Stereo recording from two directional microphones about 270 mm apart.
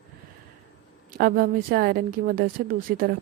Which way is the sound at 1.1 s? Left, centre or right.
Right.